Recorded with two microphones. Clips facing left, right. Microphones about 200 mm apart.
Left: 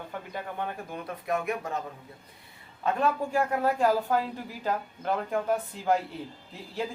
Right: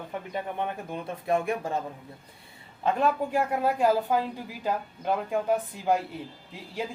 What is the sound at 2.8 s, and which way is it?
A man's voice, 20° right (ahead or behind).